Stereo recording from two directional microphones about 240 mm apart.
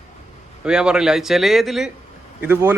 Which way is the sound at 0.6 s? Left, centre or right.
Centre.